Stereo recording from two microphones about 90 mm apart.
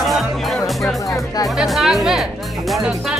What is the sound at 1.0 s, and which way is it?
Speech, 40° left (ahead or behind).